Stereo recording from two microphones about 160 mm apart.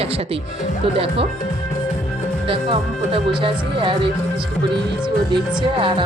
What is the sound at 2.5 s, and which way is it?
Speech, 35° right (ahead or behind).